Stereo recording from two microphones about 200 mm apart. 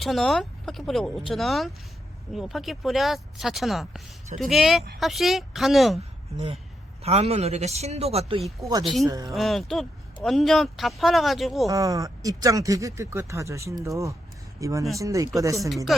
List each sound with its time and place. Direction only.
0.0 s speech: centre (ahead or behind)
7.0 s a man's voice: 30° right (ahead or behind)
8.8 s speech: centre (ahead or behind)
9.0 s speech: 15° right (ahead or behind)
9.3 s speech: centre (ahead or behind)
11.7 s speech: 15° right (ahead or behind)
15.7 s speech: centre (ahead or behind)